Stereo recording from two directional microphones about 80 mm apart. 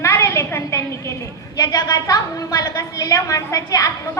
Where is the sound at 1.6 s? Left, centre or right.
Left.